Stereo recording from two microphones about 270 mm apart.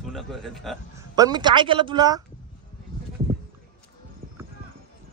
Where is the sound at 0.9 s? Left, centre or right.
Centre.